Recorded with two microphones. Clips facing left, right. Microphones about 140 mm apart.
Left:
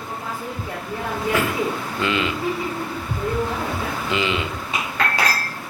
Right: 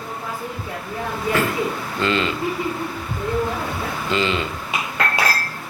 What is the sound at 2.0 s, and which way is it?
Speech, 10° left (ahead or behind).